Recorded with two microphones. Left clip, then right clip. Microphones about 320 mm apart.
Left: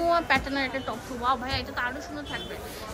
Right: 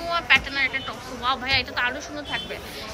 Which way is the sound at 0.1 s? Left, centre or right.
Centre.